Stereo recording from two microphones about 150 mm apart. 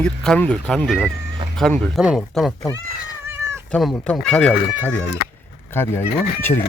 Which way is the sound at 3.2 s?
15° right (ahead or behind).